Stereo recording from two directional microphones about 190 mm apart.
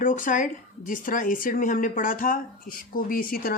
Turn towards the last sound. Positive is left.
turn(degrees=50)  # may be behind; listen again after turning